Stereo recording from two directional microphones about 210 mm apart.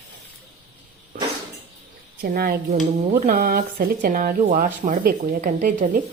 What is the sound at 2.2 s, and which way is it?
Speech, 45° right (ahead or behind).